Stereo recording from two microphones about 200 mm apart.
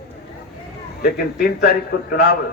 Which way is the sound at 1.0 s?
50° left (ahead or behind).